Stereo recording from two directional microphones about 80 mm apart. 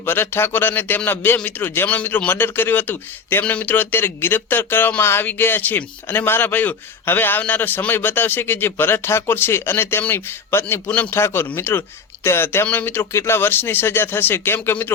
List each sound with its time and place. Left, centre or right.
0.0 s speech: left